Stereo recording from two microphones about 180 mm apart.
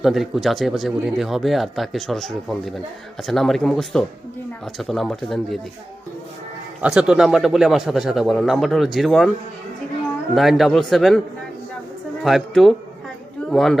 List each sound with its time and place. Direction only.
0.0 s speech: centre (ahead or behind)
6.8 s speech: 5° right (ahead or behind)
10.3 s speech: centre (ahead or behind)
12.2 s speech: centre (ahead or behind)